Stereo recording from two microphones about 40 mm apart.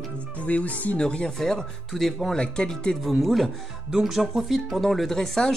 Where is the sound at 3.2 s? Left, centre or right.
Centre.